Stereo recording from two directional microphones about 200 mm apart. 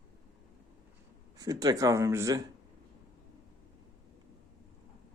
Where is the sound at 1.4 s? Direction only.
20° right (ahead or behind).